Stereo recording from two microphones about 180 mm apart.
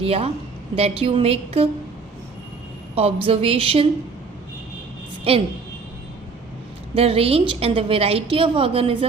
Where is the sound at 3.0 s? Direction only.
30° right (ahead or behind).